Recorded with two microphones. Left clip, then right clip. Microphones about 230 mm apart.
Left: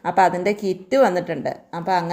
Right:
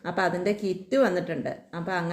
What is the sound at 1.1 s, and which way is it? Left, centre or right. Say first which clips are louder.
Speech: left 5 dB; centre.